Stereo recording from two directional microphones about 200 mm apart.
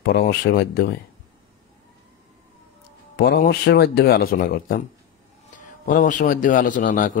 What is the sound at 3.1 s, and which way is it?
A man's voice, 50° left (ahead or behind).